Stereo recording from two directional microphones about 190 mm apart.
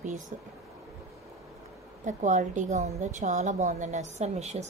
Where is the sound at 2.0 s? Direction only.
40° right (ahead or behind).